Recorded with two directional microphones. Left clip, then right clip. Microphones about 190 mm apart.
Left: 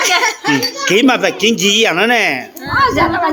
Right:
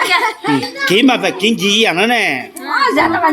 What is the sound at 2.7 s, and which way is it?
Speech, 50° right (ahead or behind).